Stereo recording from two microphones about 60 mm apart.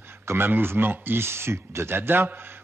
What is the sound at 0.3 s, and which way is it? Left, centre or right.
Speech, right.